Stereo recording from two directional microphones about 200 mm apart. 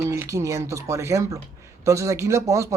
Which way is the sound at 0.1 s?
15° right (ahead or behind).